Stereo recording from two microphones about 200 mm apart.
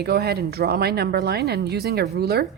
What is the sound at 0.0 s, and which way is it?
Speech, 55° right (ahead or behind).